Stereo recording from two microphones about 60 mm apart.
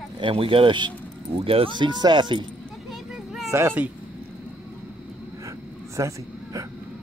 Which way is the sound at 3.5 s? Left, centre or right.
Right.